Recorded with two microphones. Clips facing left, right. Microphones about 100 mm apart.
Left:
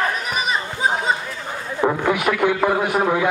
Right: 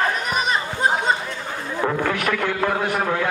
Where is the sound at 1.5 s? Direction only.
10° left (ahead or behind).